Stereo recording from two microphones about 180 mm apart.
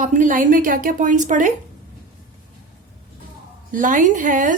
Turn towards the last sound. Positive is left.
turn(degrees=-45)  # may be behind; listen again after turning